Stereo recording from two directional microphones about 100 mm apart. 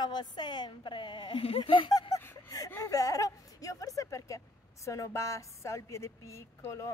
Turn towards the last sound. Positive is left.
turn(degrees=30)  # may be behind; listen again after turning